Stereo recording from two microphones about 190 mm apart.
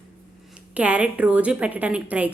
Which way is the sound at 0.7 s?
5° right (ahead or behind).